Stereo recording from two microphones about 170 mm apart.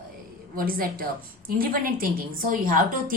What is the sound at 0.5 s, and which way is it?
A woman's voice, 60° right (ahead or behind).